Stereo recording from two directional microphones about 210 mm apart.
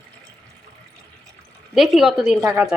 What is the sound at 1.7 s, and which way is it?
A woman's voice, centre (ahead or behind).